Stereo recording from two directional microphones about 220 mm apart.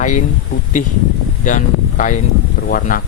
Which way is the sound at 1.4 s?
35° left (ahead or behind).